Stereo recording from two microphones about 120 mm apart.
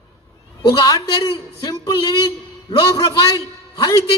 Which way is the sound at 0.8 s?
30° left (ahead or behind).